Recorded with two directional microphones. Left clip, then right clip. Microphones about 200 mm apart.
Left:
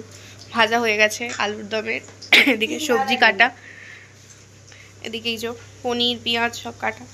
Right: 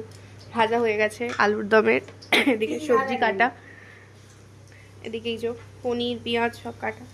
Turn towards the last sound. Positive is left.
turn(degrees=-5)  # may be behind; listen again after turning